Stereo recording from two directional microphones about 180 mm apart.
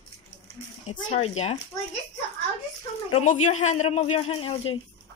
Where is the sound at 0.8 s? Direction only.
35° left (ahead or behind).